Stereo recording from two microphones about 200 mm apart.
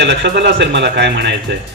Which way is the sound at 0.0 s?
60° right (ahead or behind).